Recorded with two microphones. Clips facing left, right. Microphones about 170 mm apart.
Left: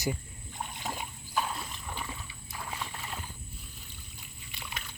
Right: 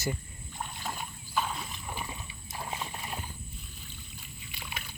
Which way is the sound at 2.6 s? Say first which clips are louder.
Right 2 dB; 25° right (ahead or behind).